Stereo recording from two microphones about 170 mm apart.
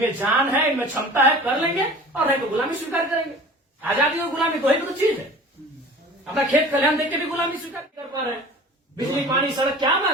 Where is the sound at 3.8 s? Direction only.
10° right (ahead or behind).